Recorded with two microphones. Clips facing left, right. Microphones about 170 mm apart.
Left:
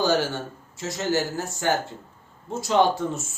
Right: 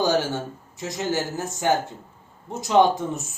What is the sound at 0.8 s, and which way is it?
Speech, 15° right (ahead or behind).